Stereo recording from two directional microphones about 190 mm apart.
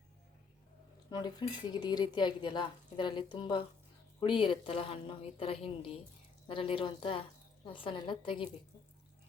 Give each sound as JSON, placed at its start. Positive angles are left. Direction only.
{"t": 1.1, "sound": "speech", "side_deg": 20}